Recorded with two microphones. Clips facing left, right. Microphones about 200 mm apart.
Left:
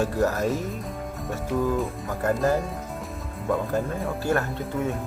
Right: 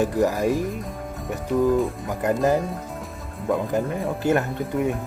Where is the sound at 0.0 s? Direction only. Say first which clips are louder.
Right 3 dB; 15° right (ahead or behind).